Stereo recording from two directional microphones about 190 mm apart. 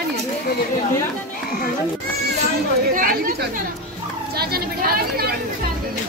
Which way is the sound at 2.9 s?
45° right (ahead or behind).